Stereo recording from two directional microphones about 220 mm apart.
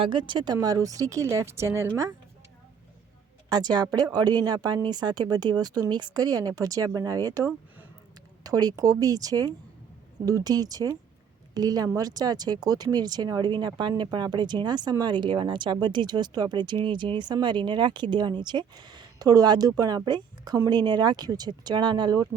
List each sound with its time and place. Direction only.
0.0 s speech: 20° right (ahead or behind)
3.5 s speech: 20° right (ahead or behind)